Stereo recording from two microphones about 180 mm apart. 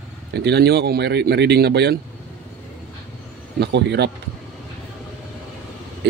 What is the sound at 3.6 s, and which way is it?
Speech, 75° right (ahead or behind).